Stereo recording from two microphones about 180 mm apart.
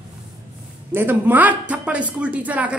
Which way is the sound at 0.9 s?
10° right (ahead or behind).